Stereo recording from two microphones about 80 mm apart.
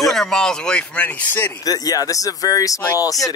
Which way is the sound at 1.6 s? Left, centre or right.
Left.